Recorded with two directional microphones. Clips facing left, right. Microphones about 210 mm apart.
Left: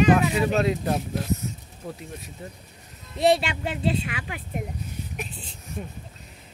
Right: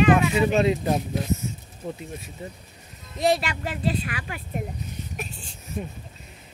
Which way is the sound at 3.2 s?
25° left (ahead or behind).